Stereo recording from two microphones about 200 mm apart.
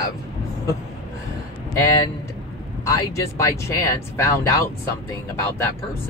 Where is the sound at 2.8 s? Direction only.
15° left (ahead or behind).